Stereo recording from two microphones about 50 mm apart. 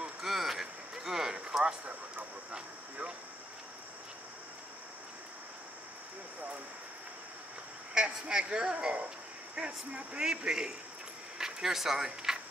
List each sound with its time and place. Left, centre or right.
0.2 s a sound: centre
2.5 s speech: centre
7.9 s speech: centre